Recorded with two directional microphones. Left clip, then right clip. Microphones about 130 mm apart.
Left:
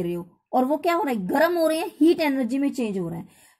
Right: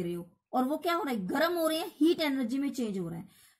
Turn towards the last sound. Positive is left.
turn(degrees=35)  # may be behind; listen again after turning